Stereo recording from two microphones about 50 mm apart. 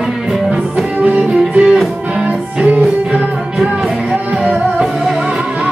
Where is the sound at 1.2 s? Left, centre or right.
Centre.